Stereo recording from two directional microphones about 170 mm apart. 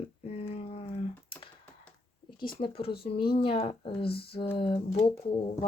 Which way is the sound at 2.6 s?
35° left (ahead or behind).